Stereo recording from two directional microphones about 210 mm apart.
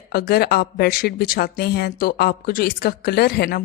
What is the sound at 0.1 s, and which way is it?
Speech, 50° left (ahead or behind).